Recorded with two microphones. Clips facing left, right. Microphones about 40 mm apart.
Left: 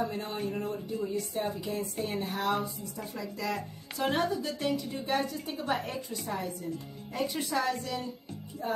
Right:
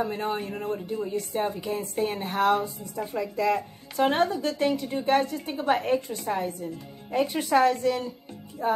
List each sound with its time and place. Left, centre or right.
0.1 s speech: right
2.0 s speech: right
3.0 s a woman's voice: right
4.0 s a woman's voice: right
7.4 s a woman's voice: right